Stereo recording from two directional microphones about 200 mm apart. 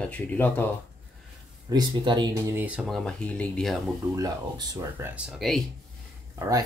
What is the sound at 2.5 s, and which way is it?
Speech, 5° right (ahead or behind).